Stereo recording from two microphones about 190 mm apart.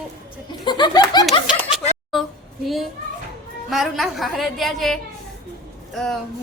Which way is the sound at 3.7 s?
Centre (ahead or behind).